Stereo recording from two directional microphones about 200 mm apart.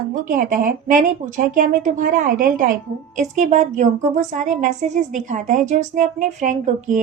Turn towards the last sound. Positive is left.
turn(degrees=-40)  # may be behind; listen again after turning